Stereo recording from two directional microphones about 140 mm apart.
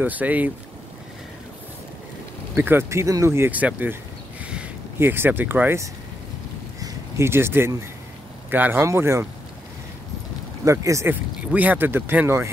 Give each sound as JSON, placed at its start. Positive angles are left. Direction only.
{"t": 0.0, "sound": "speech", "side_deg": -10}
{"t": 2.5, "sound": "speech", "side_deg": -15}
{"t": 10.6, "sound": "speech", "side_deg": -20}
{"t": 11.5, "sound": "speech", "side_deg": -10}